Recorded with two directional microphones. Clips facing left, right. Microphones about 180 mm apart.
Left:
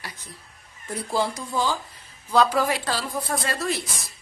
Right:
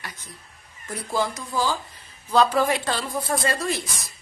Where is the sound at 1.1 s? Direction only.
30° left (ahead or behind).